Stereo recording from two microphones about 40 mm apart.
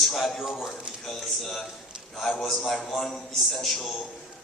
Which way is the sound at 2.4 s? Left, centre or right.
Centre.